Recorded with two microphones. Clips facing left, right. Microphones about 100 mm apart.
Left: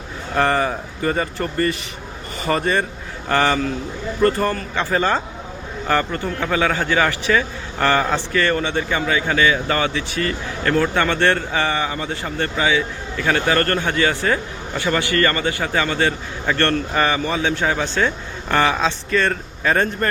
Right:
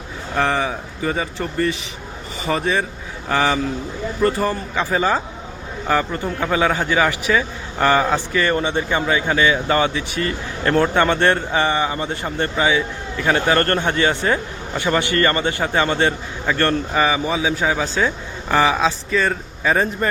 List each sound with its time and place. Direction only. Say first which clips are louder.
0.3 s a man's voice: left 2 dB; centre (ahead or behind); by 16.1 s 25° right (ahead or behind)
16.5 s speech: even; 10° right (ahead or behind)